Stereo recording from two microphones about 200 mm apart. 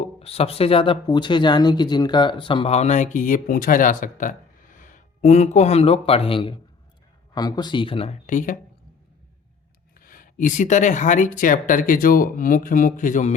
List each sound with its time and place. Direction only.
0.0 s speech: 30° left (ahead or behind)
10.0 s speech: 45° left (ahead or behind)